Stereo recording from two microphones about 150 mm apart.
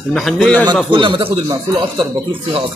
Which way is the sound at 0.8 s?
35° right (ahead or behind).